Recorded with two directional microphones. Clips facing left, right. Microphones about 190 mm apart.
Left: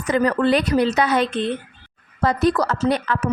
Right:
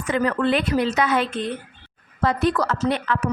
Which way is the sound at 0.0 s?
40° left (ahead or behind).